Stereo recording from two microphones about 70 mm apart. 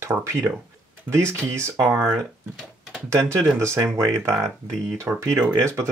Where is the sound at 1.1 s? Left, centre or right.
Right.